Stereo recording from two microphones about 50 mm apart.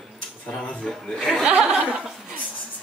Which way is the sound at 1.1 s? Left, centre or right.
Centre.